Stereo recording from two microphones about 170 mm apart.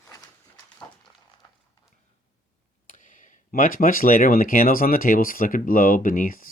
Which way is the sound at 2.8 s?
50° left (ahead or behind).